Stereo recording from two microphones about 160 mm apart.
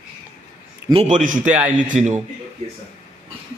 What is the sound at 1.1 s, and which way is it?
Speech, 55° right (ahead or behind).